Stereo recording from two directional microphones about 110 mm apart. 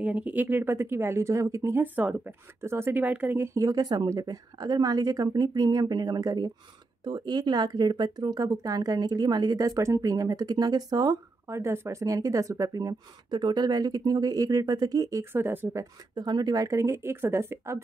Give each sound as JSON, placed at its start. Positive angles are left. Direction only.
{"t": 0.0, "sound": "speech", "side_deg": -10}
{"t": 11.5, "sound": "speech", "side_deg": -25}
{"t": 15.8, "sound": "speech", "side_deg": -40}